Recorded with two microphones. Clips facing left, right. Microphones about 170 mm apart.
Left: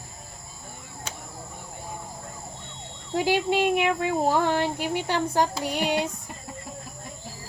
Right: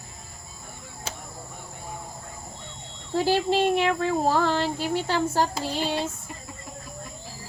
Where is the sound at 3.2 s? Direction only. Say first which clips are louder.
Right 1 dB; 15° left (ahead or behind).